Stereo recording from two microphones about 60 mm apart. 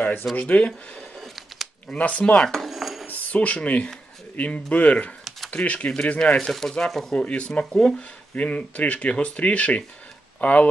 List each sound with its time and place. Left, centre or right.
0.0 s a sound: left
0.4 s speech: left
1.2 s a sound: centre
1.9 s speech: left
2.5 s cutlery: centre
3.1 s speech: left; by 7.2 s centre
7.2 s speech: centre